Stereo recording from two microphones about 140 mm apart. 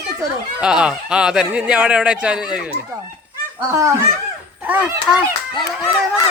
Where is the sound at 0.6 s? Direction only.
5° right (ahead or behind).